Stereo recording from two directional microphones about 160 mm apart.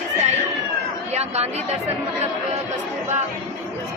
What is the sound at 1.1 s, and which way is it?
Speech, 40° right (ahead or behind).